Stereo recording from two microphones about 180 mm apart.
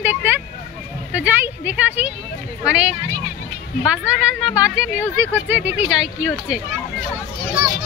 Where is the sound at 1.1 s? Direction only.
10° right (ahead or behind).